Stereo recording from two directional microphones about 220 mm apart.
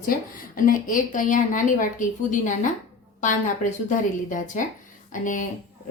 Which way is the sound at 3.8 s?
35° left (ahead or behind).